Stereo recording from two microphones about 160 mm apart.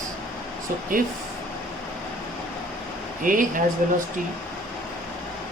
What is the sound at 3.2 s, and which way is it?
Speech, 60° right (ahead or behind).